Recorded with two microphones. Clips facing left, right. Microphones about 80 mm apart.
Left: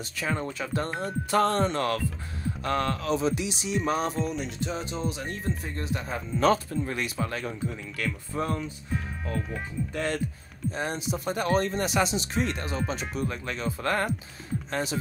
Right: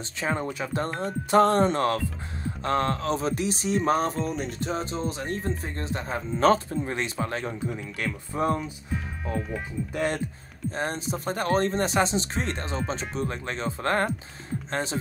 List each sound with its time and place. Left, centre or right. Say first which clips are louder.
0.2 s speech: right 2 dB; right
10.7 s speech: right 1 dB; right